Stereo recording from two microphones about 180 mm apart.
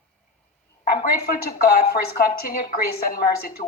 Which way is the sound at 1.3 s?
60° left (ahead or behind).